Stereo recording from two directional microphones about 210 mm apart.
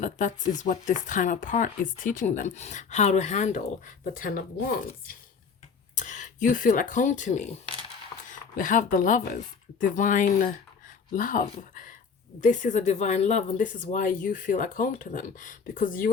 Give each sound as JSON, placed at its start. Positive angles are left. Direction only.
{"t": 0.0, "sound": "speech", "side_deg": 35}
{"t": 5.9, "sound": "speech", "side_deg": 35}